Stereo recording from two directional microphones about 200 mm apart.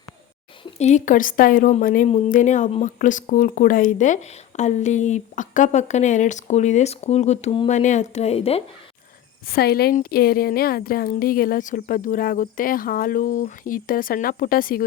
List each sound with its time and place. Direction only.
0.6 s a woman's voice: 35° left (ahead or behind)
9.5 s a woman's voice: 50° left (ahead or behind)